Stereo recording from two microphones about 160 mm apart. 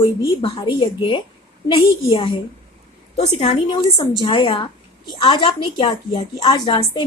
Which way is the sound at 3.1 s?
40° left (ahead or behind).